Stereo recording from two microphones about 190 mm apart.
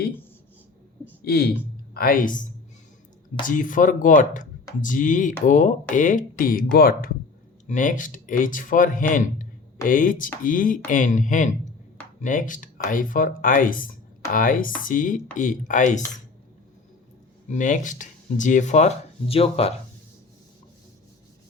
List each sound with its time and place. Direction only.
1.2 s a man's voice: 55° left (ahead or behind); by 16.0 s 40° left (ahead or behind)
17.5 s speech: 40° left (ahead or behind)